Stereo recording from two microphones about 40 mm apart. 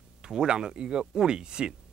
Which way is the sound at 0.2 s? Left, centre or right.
Centre.